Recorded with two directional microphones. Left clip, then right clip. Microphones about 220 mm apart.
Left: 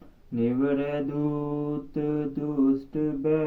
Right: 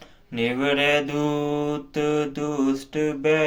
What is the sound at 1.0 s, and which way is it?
Mantra, 15° right (ahead or behind).